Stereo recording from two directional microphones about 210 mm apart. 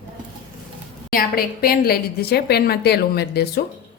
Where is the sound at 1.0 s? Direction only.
45° left (ahead or behind).